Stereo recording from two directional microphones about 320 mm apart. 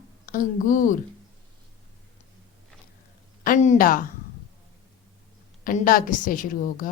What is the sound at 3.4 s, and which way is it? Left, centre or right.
Speech, left.